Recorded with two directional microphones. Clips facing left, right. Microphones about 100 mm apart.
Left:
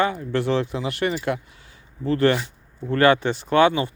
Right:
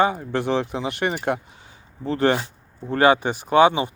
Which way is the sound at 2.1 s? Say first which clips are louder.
Left 1 dB; 20° right (ahead or behind).